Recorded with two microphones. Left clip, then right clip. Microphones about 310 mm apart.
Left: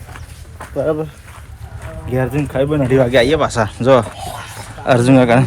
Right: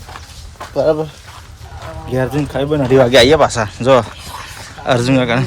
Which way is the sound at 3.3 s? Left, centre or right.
Centre.